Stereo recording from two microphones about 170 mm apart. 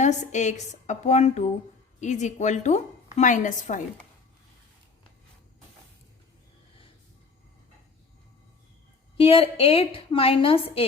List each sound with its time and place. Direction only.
0.0 s a woman's voice: 45° left (ahead or behind)
9.1 s a woman's voice: 35° left (ahead or behind)